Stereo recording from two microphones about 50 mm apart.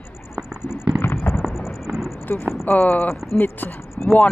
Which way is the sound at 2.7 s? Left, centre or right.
Left.